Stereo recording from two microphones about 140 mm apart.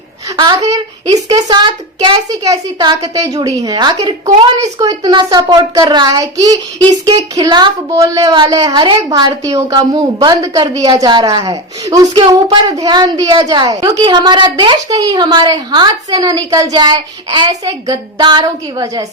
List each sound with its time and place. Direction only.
0.3 s a child's voice: 25° right (ahead or behind)
2.3 s a child's voice: 25° right (ahead or behind)